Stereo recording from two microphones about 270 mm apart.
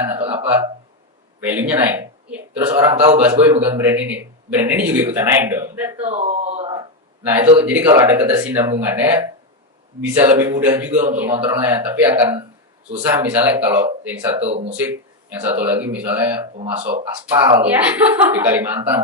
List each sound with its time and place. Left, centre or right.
0.0 s a sound: centre
1.4 s speech: centre
2.7 s a man's voice: centre
3.2 s a man's voice: centre
6.0 s a sound: right
7.6 s a man's voice: centre
11.3 s speech: centre
11.6 s a man's voice: centre
14.4 s speech: right
14.8 s a man's voice: centre